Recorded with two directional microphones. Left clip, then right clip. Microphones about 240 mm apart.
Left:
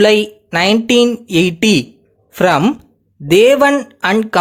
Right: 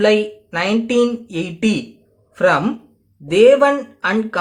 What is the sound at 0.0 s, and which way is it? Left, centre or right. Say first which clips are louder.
Speech: left 4 dB; left.